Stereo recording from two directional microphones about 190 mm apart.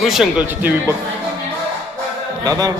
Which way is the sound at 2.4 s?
15° right (ahead or behind).